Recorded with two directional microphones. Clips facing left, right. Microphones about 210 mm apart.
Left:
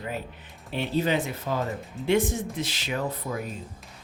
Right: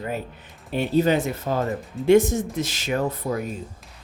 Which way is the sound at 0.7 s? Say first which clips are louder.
Right 6 dB; 45° right (ahead or behind).